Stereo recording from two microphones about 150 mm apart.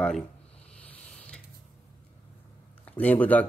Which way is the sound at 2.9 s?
10° left (ahead or behind).